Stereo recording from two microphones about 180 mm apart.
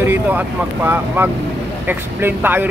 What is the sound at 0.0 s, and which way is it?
Speech, 10° right (ahead or behind).